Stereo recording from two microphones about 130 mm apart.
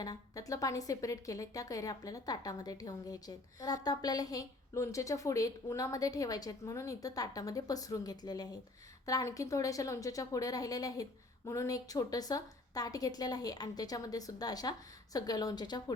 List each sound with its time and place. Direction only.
0.0 s a woman's voice: 30° left (ahead or behind)